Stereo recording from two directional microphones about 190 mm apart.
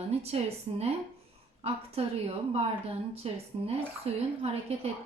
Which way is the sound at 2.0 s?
30° right (ahead or behind).